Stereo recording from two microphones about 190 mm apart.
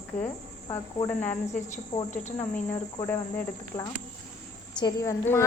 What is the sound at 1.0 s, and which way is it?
Speech, 10° left (ahead or behind).